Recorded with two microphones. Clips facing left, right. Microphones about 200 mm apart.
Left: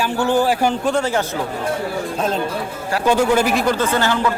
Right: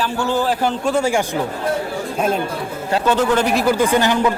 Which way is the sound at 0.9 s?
10° right (ahead or behind).